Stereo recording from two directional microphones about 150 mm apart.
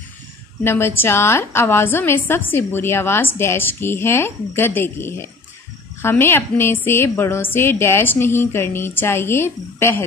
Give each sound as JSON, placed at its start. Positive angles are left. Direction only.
{"t": 0.7, "sound": "a woman's voice", "side_deg": 15}